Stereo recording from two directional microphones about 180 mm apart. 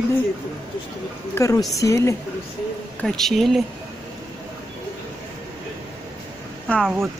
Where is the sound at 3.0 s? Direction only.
5° left (ahead or behind).